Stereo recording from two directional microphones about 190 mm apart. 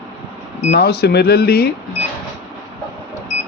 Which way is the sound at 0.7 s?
60° left (ahead or behind).